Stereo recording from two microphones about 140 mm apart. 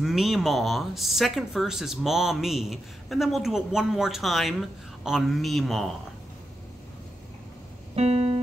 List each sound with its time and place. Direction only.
0.0 s speech: centre (ahead or behind)
7.9 s keyboard: 50° right (ahead or behind)